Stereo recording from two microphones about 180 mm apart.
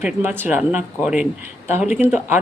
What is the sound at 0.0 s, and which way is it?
A woman's voice, 10° right (ahead or behind).